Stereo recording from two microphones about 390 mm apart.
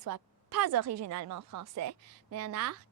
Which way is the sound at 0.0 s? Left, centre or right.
Right.